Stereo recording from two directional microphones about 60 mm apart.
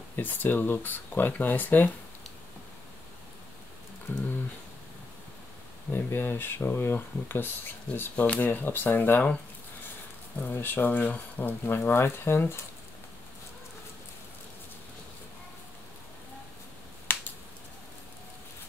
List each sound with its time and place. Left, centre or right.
0.1 s speech: left
4.1 s speech: left
5.9 s speech: left
10.4 s speech: left
17.1 s finger snapping: left